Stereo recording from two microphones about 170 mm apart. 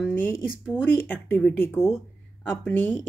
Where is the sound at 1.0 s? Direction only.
10° left (ahead or behind).